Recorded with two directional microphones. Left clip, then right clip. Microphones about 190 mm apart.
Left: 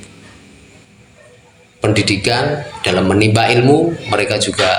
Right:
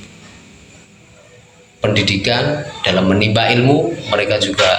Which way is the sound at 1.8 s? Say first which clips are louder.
Left 1 dB; 50° left (ahead or behind).